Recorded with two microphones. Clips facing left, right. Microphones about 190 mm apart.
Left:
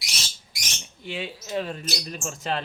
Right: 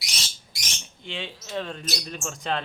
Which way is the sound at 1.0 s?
5° left (ahead or behind).